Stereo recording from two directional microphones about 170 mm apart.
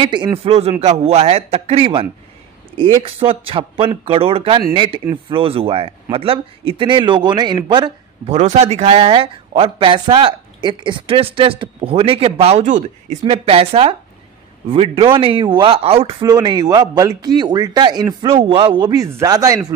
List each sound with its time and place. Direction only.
0.0 s speech: 30° right (ahead or behind)
8.3 s speech: 40° right (ahead or behind)
13.2 s speech: 35° right (ahead or behind)